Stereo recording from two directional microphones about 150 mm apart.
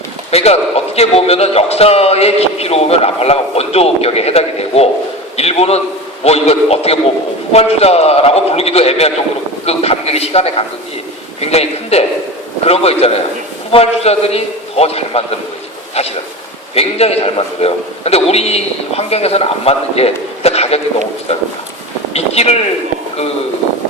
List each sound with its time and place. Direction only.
0.3 s a man's voice: 45° left (ahead or behind)
22.1 s speech: 45° left (ahead or behind)